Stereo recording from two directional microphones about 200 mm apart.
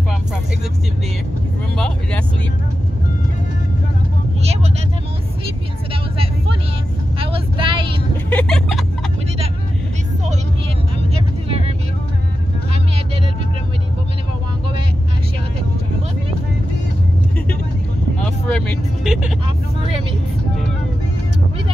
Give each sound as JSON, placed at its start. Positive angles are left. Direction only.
{"t": 7.2, "sound": "vehicle", "side_deg": -25}
{"t": 8.3, "sound": "a sound", "side_deg": 5}
{"t": 11.4, "sound": "vehicle", "side_deg": -30}
{"t": 18.2, "sound": "vehicle", "side_deg": 0}